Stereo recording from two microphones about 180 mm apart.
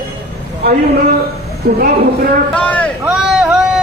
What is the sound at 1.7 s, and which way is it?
Speech, 60° right (ahead or behind).